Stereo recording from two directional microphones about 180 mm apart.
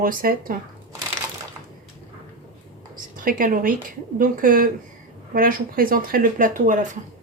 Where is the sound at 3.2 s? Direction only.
50° right (ahead or behind).